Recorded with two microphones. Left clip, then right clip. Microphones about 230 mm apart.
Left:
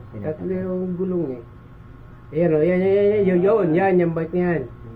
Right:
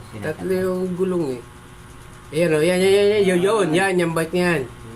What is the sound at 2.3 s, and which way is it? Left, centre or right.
A woman's voice, centre.